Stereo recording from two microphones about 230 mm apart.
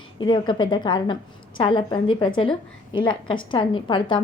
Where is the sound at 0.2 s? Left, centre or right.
Centre.